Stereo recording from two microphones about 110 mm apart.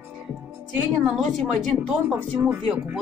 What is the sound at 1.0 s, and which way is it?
Speech, centre (ahead or behind).